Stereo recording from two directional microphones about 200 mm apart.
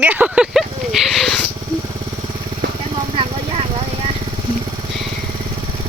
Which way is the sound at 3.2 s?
30° right (ahead or behind).